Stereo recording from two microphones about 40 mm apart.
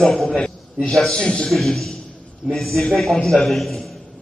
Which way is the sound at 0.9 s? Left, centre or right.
Centre.